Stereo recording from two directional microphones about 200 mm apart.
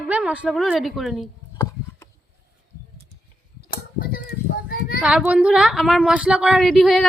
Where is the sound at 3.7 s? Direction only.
45° left (ahead or behind).